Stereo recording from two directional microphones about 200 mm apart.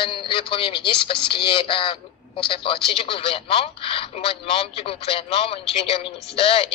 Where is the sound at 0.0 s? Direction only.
25° left (ahead or behind).